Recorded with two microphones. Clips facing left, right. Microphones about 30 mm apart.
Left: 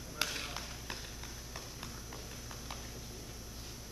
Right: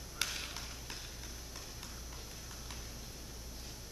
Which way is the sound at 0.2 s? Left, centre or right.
Centre.